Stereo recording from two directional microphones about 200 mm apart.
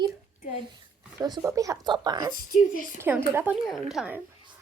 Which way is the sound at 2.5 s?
40° left (ahead or behind).